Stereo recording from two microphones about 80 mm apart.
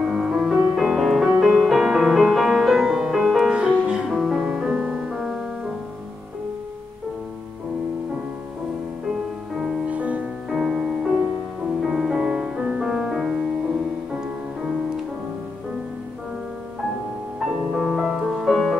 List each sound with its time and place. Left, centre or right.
0.0 s music: centre
9.8 s music: centre
10.5 s music: centre
17.7 s music: centre